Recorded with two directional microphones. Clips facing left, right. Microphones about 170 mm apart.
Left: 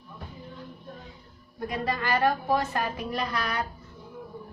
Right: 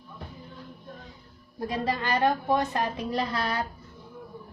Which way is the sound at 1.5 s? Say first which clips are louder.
Right 1 dB; 30° right (ahead or behind).